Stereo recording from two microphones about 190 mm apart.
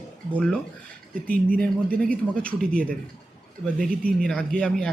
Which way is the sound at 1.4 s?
50° right (ahead or behind).